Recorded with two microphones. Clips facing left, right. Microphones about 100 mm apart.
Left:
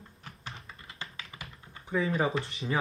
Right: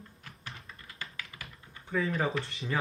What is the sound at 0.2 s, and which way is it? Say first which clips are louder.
Typing: left 3 dB; 25° left (ahead or behind).